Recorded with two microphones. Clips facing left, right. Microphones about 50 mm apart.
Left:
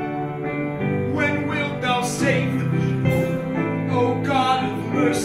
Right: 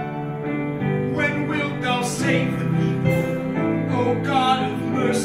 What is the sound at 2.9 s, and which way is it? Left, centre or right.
Music, right.